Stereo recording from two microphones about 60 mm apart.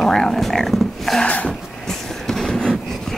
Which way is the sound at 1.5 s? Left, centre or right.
Centre.